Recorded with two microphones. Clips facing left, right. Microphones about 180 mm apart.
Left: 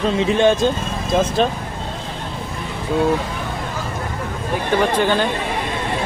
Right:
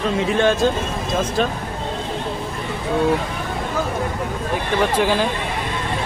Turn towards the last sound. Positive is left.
turn(degrees=-5)  # may be behind; listen again after turning